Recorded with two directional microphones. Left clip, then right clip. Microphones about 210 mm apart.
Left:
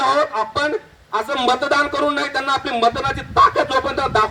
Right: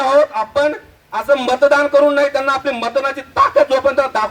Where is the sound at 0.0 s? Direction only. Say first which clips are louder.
Right 4 dB; 35° right (ahead or behind).